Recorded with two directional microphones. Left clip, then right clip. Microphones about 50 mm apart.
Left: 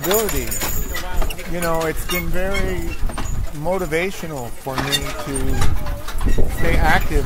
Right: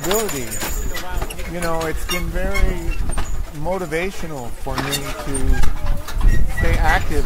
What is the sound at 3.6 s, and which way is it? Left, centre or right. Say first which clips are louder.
Speech: left 2 dB; left.